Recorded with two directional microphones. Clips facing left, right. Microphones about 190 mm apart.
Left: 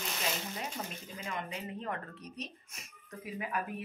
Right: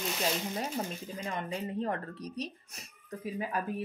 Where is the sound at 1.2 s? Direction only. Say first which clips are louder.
Right 4 dB; 35° right (ahead or behind).